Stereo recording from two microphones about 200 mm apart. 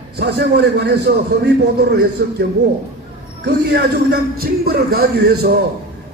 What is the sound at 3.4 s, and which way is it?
A man's voice, 55° right (ahead or behind).